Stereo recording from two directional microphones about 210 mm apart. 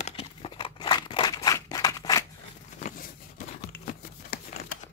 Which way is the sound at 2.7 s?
40° left (ahead or behind).